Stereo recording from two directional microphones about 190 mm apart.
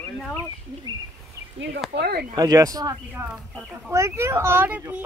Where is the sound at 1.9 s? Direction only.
60° right (ahead or behind).